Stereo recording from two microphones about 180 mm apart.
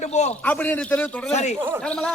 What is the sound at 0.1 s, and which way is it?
Speech, 40° left (ahead or behind).